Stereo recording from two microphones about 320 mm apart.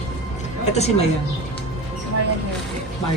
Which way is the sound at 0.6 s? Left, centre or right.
Centre.